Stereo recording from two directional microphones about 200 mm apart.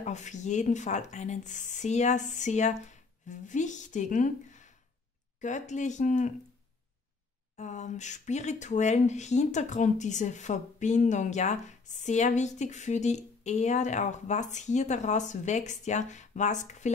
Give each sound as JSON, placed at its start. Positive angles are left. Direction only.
{"t": 0.0, "sound": "speech", "side_deg": 35}
{"t": 7.5, "sound": "speech", "side_deg": 35}